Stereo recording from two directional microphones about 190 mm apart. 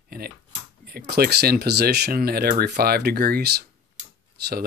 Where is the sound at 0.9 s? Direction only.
55° right (ahead or behind).